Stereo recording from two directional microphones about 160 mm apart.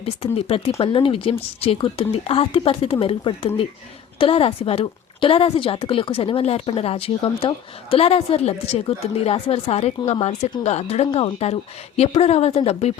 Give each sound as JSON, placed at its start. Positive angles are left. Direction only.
{"t": 0.0, "sound": "a woman's voice", "side_deg": 40}